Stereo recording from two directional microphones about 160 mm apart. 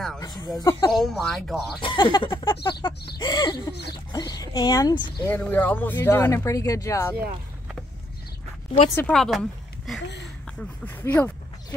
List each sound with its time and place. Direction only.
0.2 s speech: 20° left (ahead or behind)
0.9 s speech: centre (ahead or behind)
1.8 s speech: 30° left (ahead or behind)
5.3 s speech: 10° left (ahead or behind)
9.1 s speech: centre (ahead or behind)